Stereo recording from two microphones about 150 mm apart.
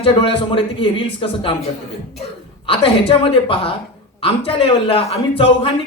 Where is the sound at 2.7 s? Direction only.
35° left (ahead or behind).